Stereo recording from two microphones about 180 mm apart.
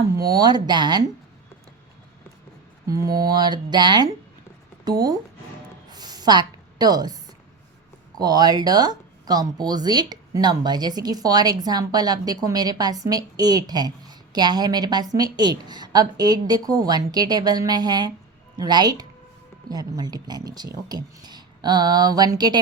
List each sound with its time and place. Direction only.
0.3 s speech: 20° right (ahead or behind)
2.8 s speech: 20° right (ahead or behind)
5.9 s writing: 20° right (ahead or behind)
8.2 s speech: 20° right (ahead or behind)